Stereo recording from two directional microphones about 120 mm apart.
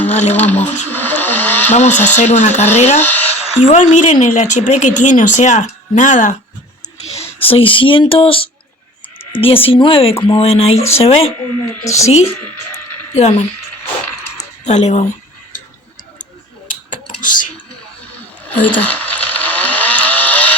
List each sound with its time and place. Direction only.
0.1 s speech: 70° left (ahead or behind)
0.3 s vehicle: 15° left (ahead or behind)
1.7 s speech: 70° left (ahead or behind)
3.0 s a woman's voice: 15° left (ahead or behind)
3.6 s speech: 80° left
6.8 s speech: 65° left (ahead or behind)
14.3 s a sound: 70° left (ahead or behind)
16.6 s computer keyboard: 90° left
18.8 s a sound: 15° left (ahead or behind)